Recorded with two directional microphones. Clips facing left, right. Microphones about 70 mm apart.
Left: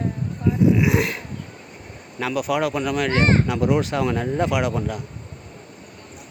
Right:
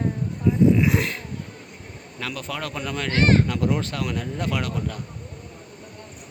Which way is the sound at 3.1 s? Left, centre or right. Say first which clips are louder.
Right 2 dB; left.